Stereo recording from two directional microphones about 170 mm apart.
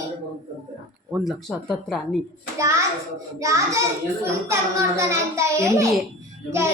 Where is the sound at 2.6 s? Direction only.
15° right (ahead or behind).